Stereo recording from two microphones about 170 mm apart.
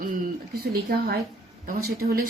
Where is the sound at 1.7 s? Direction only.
60° right (ahead or behind).